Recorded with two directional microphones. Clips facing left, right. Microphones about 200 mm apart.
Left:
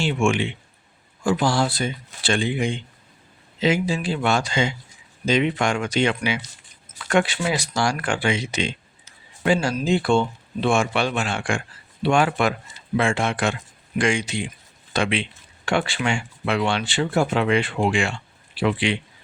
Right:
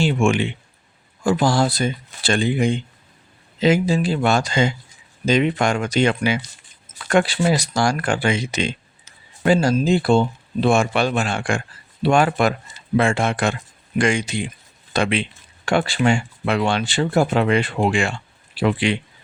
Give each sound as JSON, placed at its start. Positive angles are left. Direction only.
{"t": 0.0, "sound": "speech", "side_deg": -40}